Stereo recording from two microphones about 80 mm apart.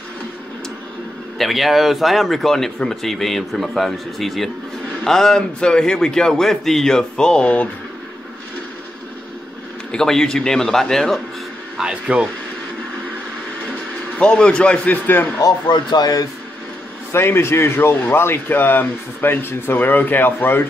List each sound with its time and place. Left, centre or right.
1.4 s a man's voice: centre
9.8 s a man's voice: centre
11.8 s speech: centre
14.1 s a man's voice: centre
15.0 s a man's voice: left
15.4 s speech: left
17.1 s a man's voice: left